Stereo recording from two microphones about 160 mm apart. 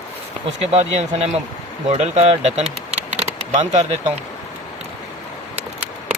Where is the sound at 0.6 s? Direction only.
45° right (ahead or behind).